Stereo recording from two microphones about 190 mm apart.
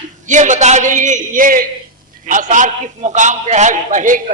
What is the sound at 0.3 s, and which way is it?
A man's voice, 40° right (ahead or behind).